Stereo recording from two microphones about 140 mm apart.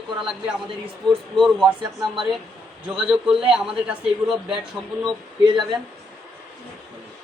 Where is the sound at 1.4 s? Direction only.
5° right (ahead or behind).